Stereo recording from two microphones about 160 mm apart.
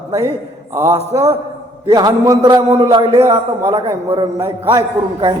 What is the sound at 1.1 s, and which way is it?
A man's voice, 20° right (ahead or behind).